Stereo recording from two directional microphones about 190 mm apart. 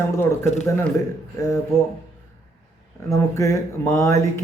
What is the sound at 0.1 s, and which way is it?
Speech, 15° left (ahead or behind).